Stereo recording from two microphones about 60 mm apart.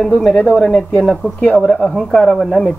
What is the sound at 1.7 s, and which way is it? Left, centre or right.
Speech, centre.